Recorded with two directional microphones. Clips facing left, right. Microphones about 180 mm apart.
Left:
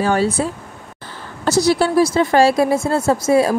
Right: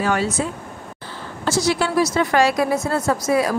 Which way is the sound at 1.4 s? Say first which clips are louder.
Left 5 dB; 35° left (ahead or behind).